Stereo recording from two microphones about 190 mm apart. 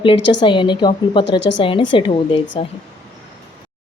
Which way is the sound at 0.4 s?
25° left (ahead or behind).